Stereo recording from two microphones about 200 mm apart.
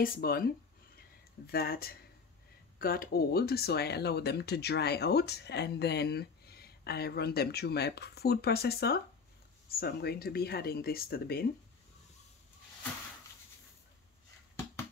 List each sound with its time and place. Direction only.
0.0 s speech: 50° left (ahead or behind)
1.5 s speech: 50° left (ahead or behind)